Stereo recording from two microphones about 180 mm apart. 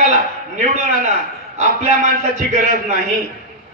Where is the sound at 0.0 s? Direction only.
45° right (ahead or behind).